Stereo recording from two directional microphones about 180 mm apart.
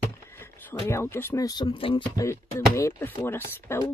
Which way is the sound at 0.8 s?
15° left (ahead or behind).